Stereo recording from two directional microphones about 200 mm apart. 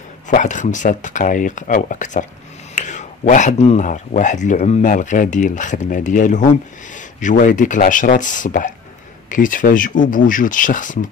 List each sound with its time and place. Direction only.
0.3 s speech: 40° left (ahead or behind)